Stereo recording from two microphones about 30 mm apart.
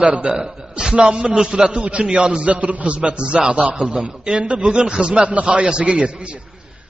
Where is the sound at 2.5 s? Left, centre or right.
Right.